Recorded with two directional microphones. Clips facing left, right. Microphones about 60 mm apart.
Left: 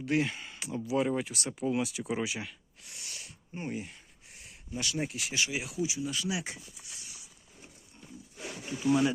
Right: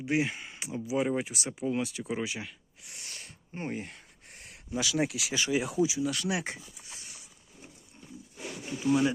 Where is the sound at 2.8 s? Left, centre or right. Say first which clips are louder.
Right 1 dB; right.